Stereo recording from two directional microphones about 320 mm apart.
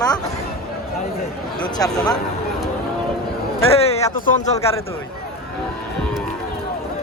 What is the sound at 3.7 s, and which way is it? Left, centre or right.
Speech, centre.